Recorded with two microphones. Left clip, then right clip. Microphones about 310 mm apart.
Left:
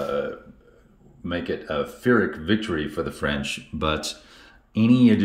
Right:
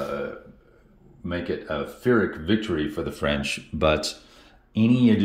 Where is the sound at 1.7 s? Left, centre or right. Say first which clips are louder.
Left 2 dB; centre.